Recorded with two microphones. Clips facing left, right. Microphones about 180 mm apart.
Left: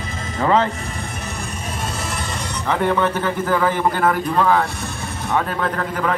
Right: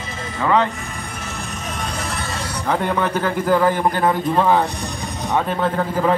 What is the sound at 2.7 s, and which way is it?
A man's voice, 10° right (ahead or behind).